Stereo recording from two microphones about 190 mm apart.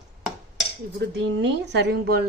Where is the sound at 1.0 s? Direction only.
65° right (ahead or behind).